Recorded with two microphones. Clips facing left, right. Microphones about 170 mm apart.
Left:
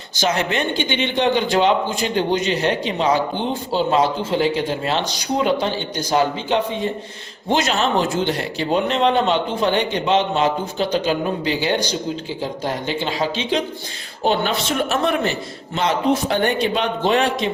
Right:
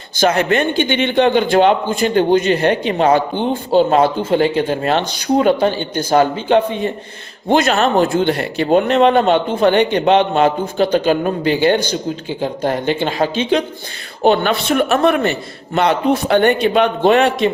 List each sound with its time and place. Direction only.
0.2 s a man's voice: 55° right (ahead or behind)